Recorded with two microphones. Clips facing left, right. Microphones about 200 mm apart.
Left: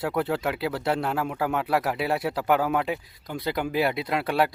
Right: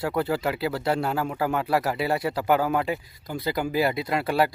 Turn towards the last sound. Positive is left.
turn(degrees=0)  # may be behind; listen again after turning